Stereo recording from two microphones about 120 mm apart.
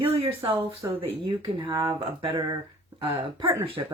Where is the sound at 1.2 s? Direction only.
40° right (ahead or behind).